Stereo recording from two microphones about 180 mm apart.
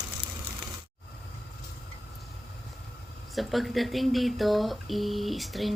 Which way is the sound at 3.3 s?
Centre (ahead or behind).